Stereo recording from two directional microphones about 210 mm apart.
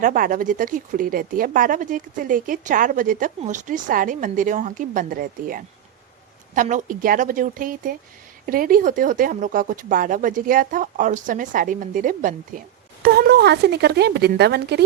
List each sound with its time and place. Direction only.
0.0 s speech: 40° right (ahead or behind)